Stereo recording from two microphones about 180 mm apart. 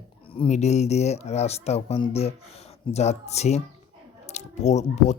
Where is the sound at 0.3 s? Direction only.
40° left (ahead or behind).